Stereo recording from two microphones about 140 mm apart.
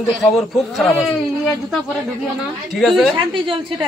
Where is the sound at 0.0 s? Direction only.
Centre (ahead or behind).